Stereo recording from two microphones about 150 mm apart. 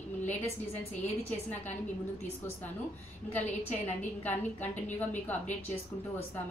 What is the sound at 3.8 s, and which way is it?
Speech, 10° left (ahead or behind).